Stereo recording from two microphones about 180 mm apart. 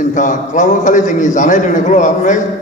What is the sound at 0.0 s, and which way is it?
A man's voice, 45° left (ahead or behind).